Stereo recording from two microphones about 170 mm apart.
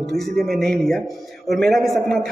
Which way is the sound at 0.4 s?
Centre (ahead or behind).